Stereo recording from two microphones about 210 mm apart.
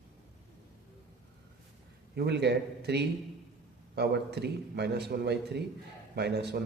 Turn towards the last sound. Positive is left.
turn(degrees=-50)  # may be behind; listen again after turning